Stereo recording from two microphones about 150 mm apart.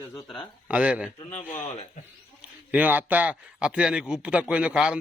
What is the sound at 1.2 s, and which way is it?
Speech, 50° left (ahead or behind).